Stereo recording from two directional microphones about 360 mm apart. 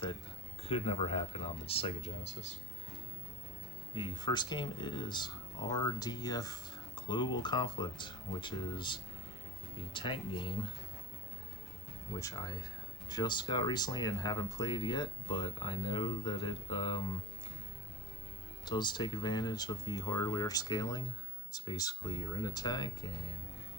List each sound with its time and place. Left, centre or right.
0.7 s speech: centre
3.9 s speech: centre
12.2 s speech: centre
18.6 s speech: centre